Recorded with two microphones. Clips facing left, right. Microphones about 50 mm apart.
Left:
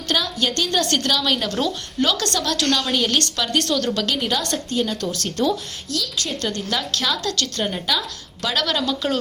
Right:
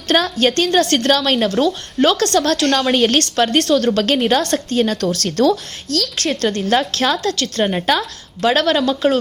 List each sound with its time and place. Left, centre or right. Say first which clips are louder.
0.1 s a woman's voice: right 7 dB; right
0.7 s a woman's voice: right 6 dB; right
1.5 s a woman's voice: right 7 dB; right
8.4 s a woman's voice: right 8 dB; right